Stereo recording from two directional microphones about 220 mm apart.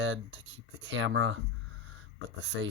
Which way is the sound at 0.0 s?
55° right (ahead or behind).